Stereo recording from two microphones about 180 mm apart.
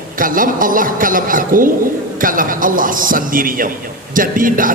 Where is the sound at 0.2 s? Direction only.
50° right (ahead or behind).